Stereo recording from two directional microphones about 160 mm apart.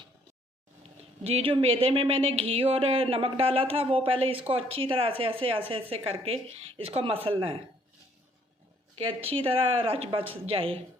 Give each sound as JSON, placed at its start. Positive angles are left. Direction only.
{"t": 1.2, "sound": "speech", "side_deg": -35}
{"t": 9.0, "sound": "speech", "side_deg": -35}